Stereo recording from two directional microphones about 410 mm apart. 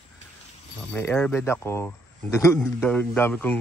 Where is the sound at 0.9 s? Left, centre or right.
Centre.